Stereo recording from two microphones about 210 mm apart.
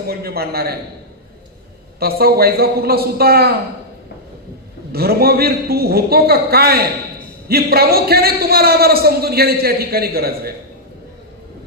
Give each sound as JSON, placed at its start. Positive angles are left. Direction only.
{"t": 0.1, "sound": "a man's voice", "side_deg": -45}
{"t": 2.0, "sound": "a man's voice", "side_deg": -45}
{"t": 4.9, "sound": "a man's voice", "side_deg": -45}